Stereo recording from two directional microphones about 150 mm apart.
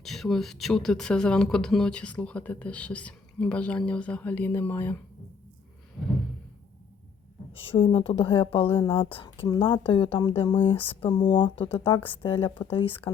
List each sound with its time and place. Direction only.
0.0 s speech: centre (ahead or behind)
7.7 s speech: 35° left (ahead or behind)